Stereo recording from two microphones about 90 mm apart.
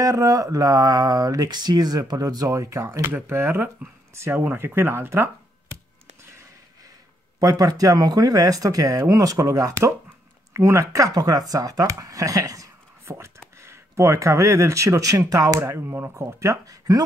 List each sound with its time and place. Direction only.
0.0 s speech: 40° right (ahead or behind)
7.3 s speech: 40° right (ahead or behind)